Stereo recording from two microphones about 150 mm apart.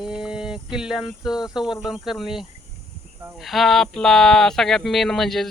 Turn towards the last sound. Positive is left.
turn(degrees=0)  # may be behind; listen again after turning